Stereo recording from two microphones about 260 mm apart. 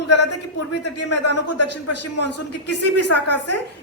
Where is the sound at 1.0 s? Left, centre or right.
Left.